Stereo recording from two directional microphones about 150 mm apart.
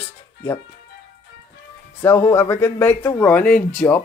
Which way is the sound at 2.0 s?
15° left (ahead or behind).